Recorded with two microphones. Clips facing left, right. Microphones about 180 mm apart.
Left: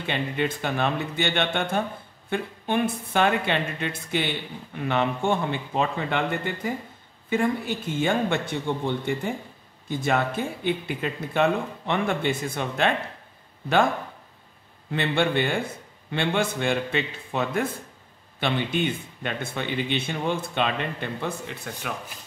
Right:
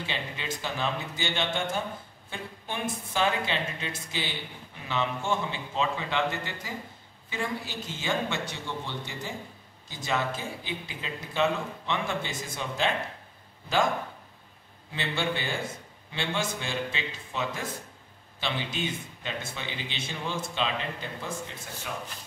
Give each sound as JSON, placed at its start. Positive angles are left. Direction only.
{"t": 0.0, "sound": "speech", "side_deg": 55}
{"t": 14.9, "sound": "speech", "side_deg": 60}